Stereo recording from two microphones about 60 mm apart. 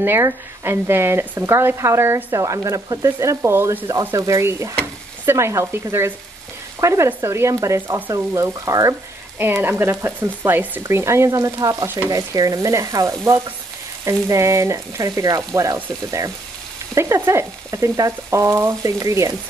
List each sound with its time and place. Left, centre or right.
0.0 s speech: right
2.3 s frying: right
3.9 s speech: right
7.2 s frying: right
9.4 s speech: right
10.8 s frying: right
16.9 s speech: right
17.9 s frying: right